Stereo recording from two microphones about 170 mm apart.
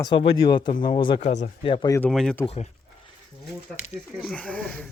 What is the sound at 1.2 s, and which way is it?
Speech, 45° left (ahead or behind).